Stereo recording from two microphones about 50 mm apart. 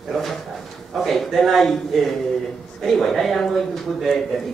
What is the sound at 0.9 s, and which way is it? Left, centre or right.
A man's voice, centre.